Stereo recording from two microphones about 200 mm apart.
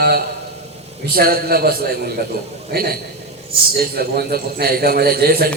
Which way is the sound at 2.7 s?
50° right (ahead or behind).